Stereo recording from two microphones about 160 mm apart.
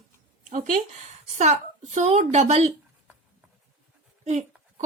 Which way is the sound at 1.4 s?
45° right (ahead or behind).